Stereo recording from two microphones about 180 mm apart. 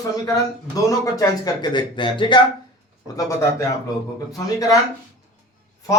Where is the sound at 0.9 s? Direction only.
20° left (ahead or behind).